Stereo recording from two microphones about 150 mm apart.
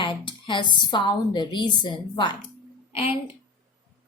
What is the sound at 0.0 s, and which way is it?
A woman's voice, 35° left (ahead or behind).